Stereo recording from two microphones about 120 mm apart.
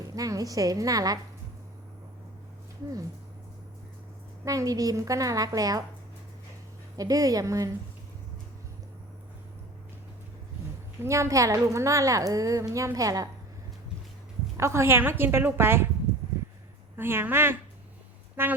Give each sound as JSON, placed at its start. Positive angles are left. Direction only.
{"t": 0.0, "sound": "a woman's voice", "side_deg": -30}
{"t": 4.4, "sound": "a woman's voice", "side_deg": -30}
{"t": 6.9, "sound": "a woman's voice", "side_deg": -30}
{"t": 11.0, "sound": "a woman's voice", "side_deg": -25}
{"t": 14.6, "sound": "a woman's voice", "side_deg": -20}
{"t": 16.4, "sound": "a sound", "side_deg": -20}
{"t": 17.0, "sound": "a woman's voice", "side_deg": -20}